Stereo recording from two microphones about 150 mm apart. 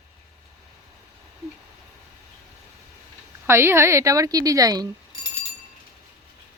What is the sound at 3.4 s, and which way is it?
A woman's voice, 15° right (ahead or behind).